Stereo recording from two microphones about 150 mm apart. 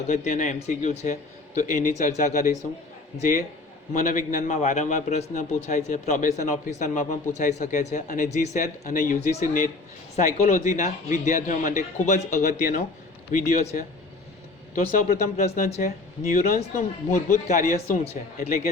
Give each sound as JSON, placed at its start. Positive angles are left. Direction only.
{"t": 0.1, "sound": "a man's voice", "side_deg": 55}
{"t": 4.0, "sound": "a man's voice", "side_deg": 65}
{"t": 14.8, "sound": "a man's voice", "side_deg": 70}
{"t": 15.4, "sound": "a man's voice", "side_deg": 50}